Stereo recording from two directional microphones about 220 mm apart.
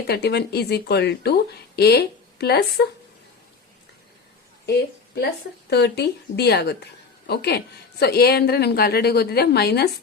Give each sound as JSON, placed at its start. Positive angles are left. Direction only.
{"t": 0.1, "sound": "speech", "side_deg": 50}
{"t": 4.6, "sound": "speech", "side_deg": 50}